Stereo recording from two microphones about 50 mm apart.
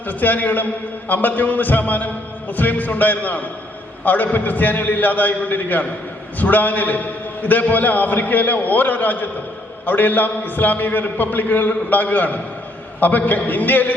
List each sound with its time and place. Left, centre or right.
0.1 s a man's voice: left